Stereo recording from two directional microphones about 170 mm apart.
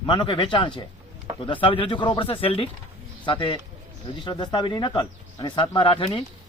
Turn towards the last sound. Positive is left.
turn(degrees=30)  # may be behind; listen again after turning